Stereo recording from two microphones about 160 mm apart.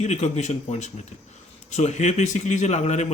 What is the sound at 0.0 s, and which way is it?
Speech, 45° left (ahead or behind).